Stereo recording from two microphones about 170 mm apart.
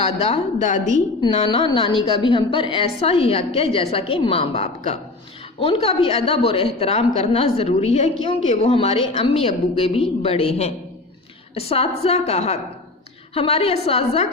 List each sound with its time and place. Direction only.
0.0 s a woman's voice: 40° left (ahead or behind)